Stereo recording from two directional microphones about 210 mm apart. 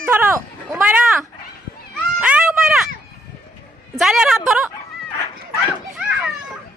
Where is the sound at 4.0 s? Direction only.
Centre (ahead or behind).